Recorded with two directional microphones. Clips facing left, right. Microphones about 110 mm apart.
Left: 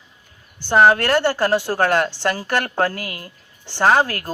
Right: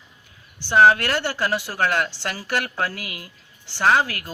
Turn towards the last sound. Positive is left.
turn(degrees=45)  # may be behind; listen again after turning